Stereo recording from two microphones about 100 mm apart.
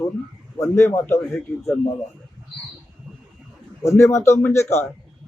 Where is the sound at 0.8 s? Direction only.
25° left (ahead or behind).